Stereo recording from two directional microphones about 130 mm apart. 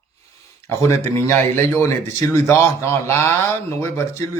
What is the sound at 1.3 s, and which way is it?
A man's voice, 15° left (ahead or behind).